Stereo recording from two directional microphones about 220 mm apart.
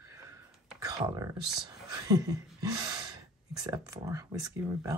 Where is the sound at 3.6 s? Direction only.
15° right (ahead or behind).